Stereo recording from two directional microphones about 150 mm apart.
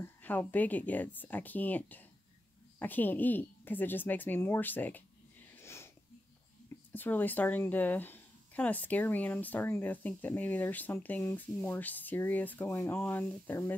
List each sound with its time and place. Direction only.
0.0 s speech: 10° left (ahead or behind)
5.5 s a sound: 15° left (ahead or behind)
6.9 s speech: 10° left (ahead or behind)